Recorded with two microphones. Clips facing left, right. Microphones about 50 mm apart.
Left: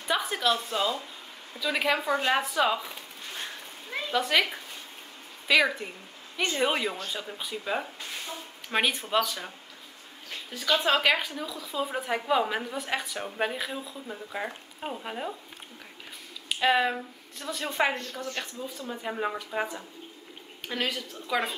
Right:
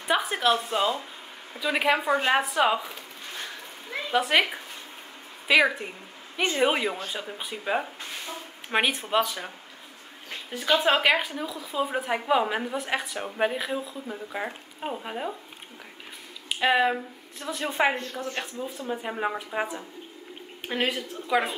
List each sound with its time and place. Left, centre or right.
0.1 s a woman's voice: right
4.3 s a woman's voice: right
10.5 s a woman's voice: right
16.4 s a woman's voice: centre